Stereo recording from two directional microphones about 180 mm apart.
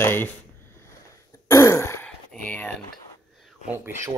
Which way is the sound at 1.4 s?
15° left (ahead or behind).